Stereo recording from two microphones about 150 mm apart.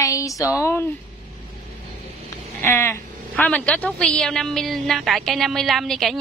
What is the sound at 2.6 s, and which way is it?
A woman's voice, 15° left (ahead or behind).